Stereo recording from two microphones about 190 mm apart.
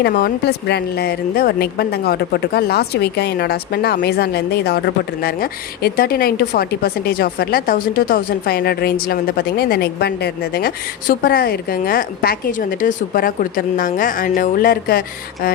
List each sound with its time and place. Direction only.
0.0 s a woman's voice: 60° left (ahead or behind)